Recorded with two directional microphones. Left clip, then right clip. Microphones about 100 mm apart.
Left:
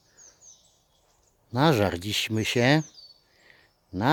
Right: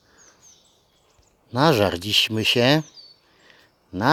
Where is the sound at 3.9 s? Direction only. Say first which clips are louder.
Right 4 dB; 20° left (ahead or behind).